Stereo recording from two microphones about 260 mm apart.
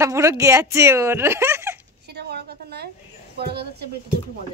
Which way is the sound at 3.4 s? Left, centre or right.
Right.